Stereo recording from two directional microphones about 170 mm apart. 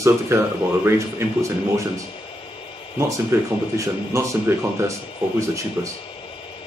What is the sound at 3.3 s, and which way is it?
Speech, 15° right (ahead or behind).